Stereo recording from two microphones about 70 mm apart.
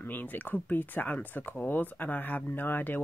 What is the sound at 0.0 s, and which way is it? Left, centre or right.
Speech, left.